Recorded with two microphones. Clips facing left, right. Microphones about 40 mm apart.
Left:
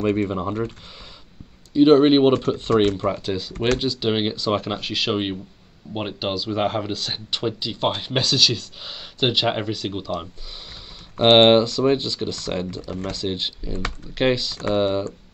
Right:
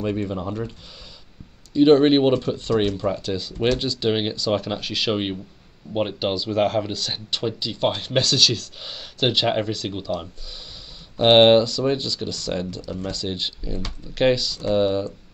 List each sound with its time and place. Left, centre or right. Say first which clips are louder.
0.0 s speech: left 4 dB; left
1.7 s speech: left 1 dB; centre
2.3 s speech: left 1 dB; left
2.7 s speech: left 3 dB; left
3.1 s speech: left 1 dB; centre